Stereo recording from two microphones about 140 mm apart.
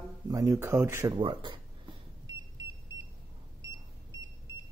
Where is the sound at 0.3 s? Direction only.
25° right (ahead or behind).